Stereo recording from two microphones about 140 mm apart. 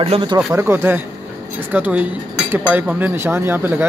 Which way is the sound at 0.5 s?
15° right (ahead or behind).